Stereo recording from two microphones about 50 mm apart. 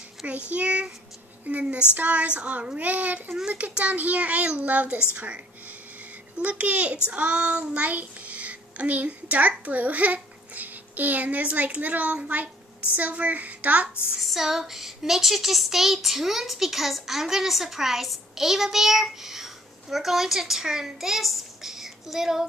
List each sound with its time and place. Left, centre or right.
0.5 s a child's voice: right
7.1 s child singing: right
9.7 s a child's voice: right
14.2 s child singing: centre